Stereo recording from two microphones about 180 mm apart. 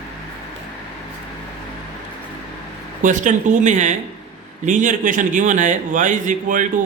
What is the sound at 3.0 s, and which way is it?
A man's voice, 45° right (ahead or behind).